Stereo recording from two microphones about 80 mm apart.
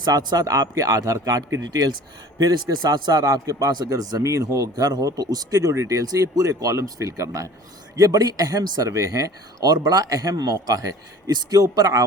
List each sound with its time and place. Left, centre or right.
0.0 s speech: right
3.8 s speech: right
4.2 s speech: right
5.7 s speech: right